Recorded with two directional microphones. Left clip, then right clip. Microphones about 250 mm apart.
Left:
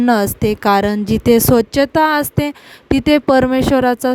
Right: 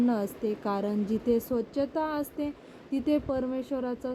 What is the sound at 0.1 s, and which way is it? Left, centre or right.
Speech, left.